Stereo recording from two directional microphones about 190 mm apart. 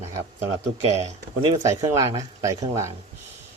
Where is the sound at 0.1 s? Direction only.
25° right (ahead or behind).